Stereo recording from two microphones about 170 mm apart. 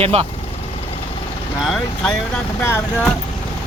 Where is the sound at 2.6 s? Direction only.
15° left (ahead or behind).